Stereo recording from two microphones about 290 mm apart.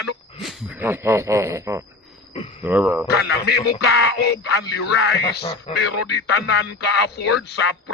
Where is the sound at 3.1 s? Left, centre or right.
Left.